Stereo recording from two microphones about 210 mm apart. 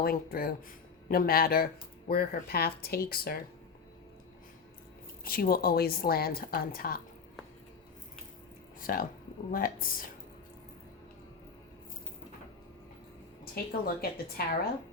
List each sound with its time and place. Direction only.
0.0 s speech: 45° left (ahead or behind)
5.2 s speech: 45° left (ahead or behind)
8.8 s speech: 45° left (ahead or behind)
13.4 s speech: 45° left (ahead or behind)